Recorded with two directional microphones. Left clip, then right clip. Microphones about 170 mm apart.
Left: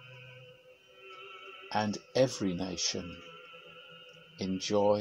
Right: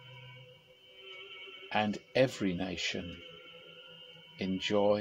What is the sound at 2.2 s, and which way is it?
Speech, 20° left (ahead or behind).